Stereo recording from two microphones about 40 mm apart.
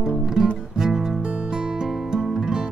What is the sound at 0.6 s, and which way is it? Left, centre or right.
Music, centre.